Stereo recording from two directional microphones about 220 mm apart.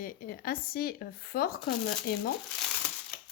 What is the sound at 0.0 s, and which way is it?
A woman's voice, 40° left (ahead or behind).